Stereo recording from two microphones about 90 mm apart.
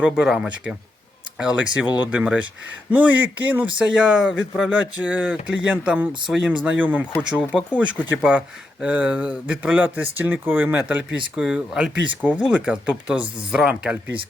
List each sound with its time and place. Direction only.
0.0 s speech: 10° right (ahead or behind)